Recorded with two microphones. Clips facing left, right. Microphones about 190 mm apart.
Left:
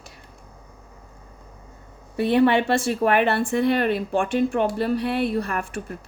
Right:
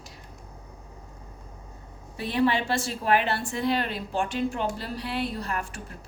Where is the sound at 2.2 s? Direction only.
60° left (ahead or behind).